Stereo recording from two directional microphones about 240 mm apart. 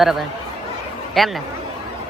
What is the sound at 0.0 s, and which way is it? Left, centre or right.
Speech, centre.